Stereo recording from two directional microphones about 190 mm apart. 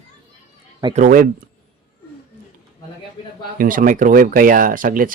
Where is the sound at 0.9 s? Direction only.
45° right (ahead or behind).